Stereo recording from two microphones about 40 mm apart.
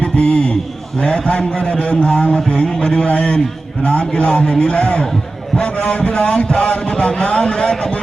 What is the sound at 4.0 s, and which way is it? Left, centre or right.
A man's voice, centre.